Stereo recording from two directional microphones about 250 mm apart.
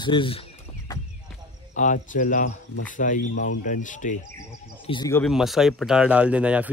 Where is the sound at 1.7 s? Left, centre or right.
Left.